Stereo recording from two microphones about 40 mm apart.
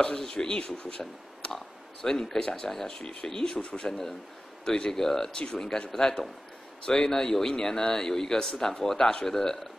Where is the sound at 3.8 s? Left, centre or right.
Centre.